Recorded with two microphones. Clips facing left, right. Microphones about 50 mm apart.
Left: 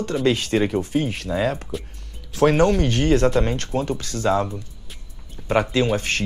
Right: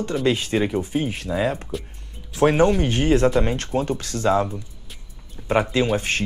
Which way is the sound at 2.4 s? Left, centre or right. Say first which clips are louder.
Even; centre.